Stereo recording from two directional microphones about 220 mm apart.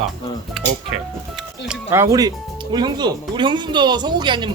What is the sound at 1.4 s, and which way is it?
Speech, 5° right (ahead or behind).